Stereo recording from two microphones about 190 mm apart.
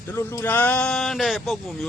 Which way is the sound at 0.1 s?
10° left (ahead or behind).